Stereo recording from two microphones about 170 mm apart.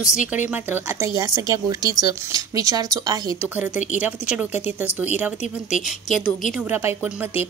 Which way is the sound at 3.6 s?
10° right (ahead or behind).